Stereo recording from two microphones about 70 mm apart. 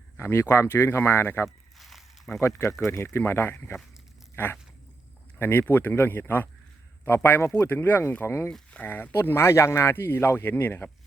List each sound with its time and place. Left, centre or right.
0.2 s speech: left
1.5 s a sound: centre
2.4 s speech: left
8.7 s speech: left